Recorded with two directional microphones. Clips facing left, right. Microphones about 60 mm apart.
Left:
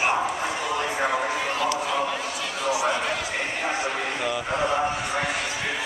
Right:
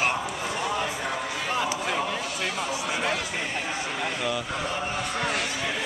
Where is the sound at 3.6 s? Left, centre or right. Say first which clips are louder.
Left 3 dB; left.